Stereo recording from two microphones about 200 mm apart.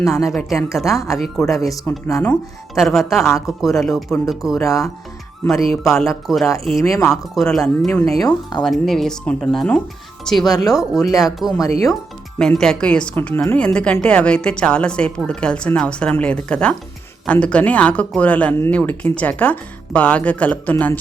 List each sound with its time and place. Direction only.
0.3 s a woman's voice: centre (ahead or behind)
4.6 s speech: 15° left (ahead or behind)
5.7 s a woman's voice: centre (ahead or behind)
6.7 s speech: 15° left (ahead or behind)
7.0 s a woman's voice: centre (ahead or behind)
8.2 s speech: 20° left (ahead or behind)
8.6 s a woman's voice: centre (ahead or behind)
10.5 s speech: 20° left (ahead or behind)
10.8 s a woman's voice: centre (ahead or behind)